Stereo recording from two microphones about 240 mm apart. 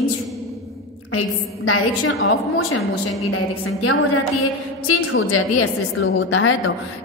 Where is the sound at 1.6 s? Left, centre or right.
Left.